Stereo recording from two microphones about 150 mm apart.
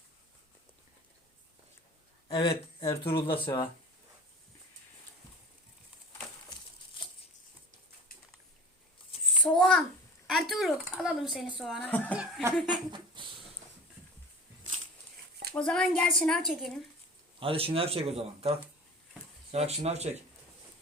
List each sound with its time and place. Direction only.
2.2 s speech: 35° left (ahead or behind)
9.4 s a sound: 5° left (ahead or behind)
10.2 s a woman's voice: centre (ahead or behind)
11.8 s speech: 10° left (ahead or behind)
12.1 s speech: 10° right (ahead or behind)
12.7 s speech: 30° right (ahead or behind)
15.5 s a woman's voice: 5° left (ahead or behind)
17.4 s speech: 40° right (ahead or behind)